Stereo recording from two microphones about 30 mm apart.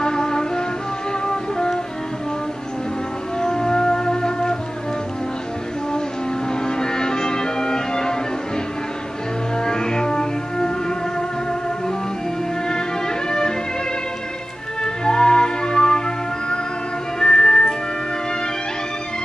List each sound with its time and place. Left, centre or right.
0.0 s music: left
3.3 s music: left
6.5 s music: left
9.6 s music: left
12.6 s music: left
14.8 s music: left
17.2 s music: left